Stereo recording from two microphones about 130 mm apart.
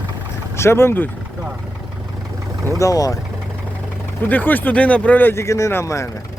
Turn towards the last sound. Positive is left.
turn(degrees=20)  # may be behind; listen again after turning